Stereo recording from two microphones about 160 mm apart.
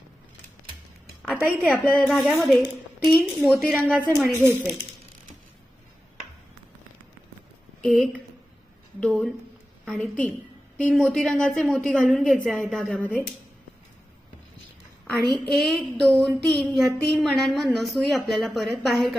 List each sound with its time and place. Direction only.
1.3 s a woman's voice: 5° right (ahead or behind)
4.4 s speech: 15° right (ahead or behind)
7.8 s a woman's voice: centre (ahead or behind)
15.1 s a woman's voice: centre (ahead or behind)